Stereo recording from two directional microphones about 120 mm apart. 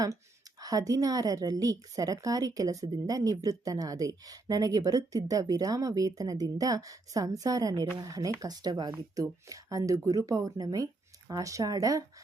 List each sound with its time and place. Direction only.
0.6 s a woman's voice: 30° right (ahead or behind)